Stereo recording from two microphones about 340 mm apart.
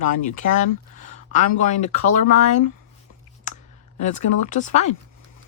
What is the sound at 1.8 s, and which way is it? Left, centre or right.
Speech, left.